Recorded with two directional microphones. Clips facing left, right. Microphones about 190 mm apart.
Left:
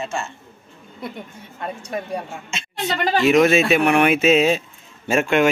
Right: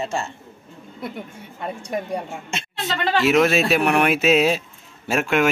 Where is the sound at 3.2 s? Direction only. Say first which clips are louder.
Left 3 dB; centre (ahead or behind).